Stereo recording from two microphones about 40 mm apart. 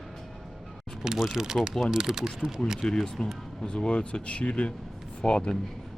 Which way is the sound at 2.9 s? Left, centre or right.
Centre.